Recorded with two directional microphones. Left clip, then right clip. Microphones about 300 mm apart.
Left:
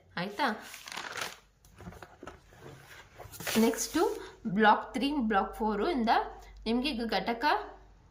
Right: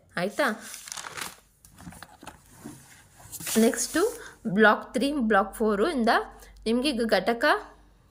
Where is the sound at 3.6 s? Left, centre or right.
Centre.